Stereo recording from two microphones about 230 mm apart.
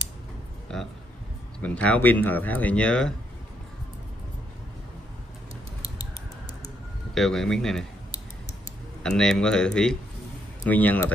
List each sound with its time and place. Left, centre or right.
0.7 s speech: centre
7.2 s speech: centre
9.0 s speech: centre